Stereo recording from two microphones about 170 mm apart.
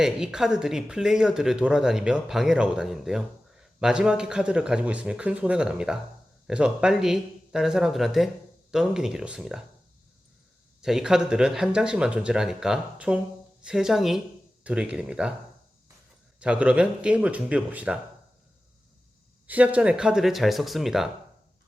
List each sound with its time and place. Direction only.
0.0 s speech: 5° right (ahead or behind)
10.8 s speech: 5° right (ahead or behind)
16.4 s speech: 5° right (ahead or behind)
19.5 s speech: 10° right (ahead or behind)